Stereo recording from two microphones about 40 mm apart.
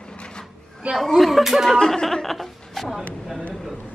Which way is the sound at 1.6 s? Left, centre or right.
Centre.